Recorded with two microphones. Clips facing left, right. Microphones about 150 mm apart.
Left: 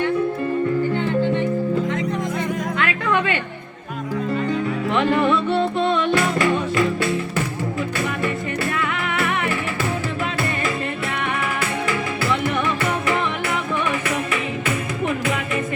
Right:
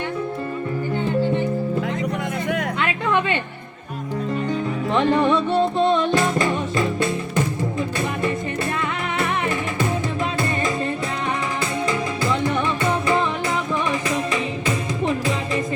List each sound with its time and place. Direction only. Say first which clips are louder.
2.7 s a sound: even; 25° right (ahead or behind)
4.9 s music: right 1 dB; 25° right (ahead or behind)
5.5 s music: right 2 dB; 40° right (ahead or behind)
6.1 s music: left 1 dB; 20° right (ahead or behind)
9.1 s music: even; 20° right (ahead or behind)
12.5 s music: right 1 dB; 35° right (ahead or behind)